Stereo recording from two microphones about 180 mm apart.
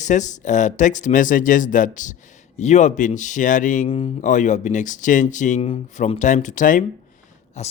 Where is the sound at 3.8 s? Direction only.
35° left (ahead or behind).